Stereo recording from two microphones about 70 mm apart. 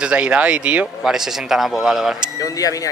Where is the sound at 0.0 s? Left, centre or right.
Centre.